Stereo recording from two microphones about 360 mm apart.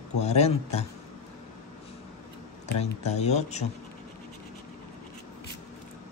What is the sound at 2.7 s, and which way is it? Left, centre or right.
Speech, centre.